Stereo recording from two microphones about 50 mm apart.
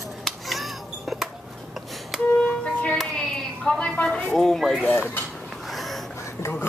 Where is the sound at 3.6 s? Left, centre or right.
Left.